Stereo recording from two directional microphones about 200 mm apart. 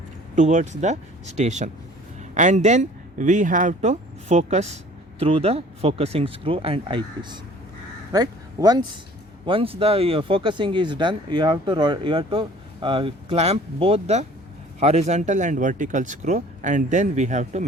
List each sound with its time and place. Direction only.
0.3 s speech: 35° right (ahead or behind)